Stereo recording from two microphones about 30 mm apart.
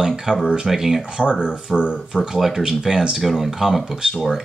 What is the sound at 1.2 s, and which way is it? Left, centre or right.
Speech, right.